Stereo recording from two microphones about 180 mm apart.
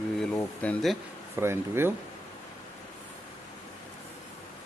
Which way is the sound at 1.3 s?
15° right (ahead or behind).